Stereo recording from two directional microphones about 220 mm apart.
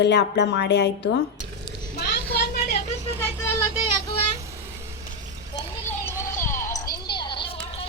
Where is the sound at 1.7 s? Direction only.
20° left (ahead or behind).